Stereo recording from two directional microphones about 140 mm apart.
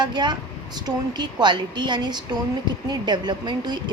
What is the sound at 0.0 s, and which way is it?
A woman's voice, 30° right (ahead or behind).